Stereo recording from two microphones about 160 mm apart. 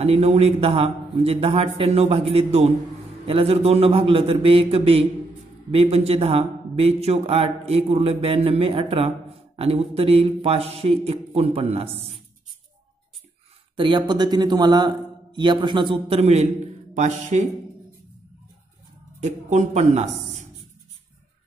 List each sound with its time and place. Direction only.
0.0 s a man's voice: 40° right (ahead or behind)
13.7 s a man's voice: 30° right (ahead or behind); by 17.5 s 45° right (ahead or behind)
19.1 s speech: 45° right (ahead or behind)